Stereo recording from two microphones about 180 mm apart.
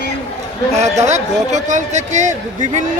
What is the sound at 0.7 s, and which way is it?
Speech, 40° right (ahead or behind).